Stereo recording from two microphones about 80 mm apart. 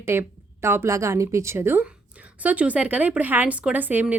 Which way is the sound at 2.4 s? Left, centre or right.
Centre.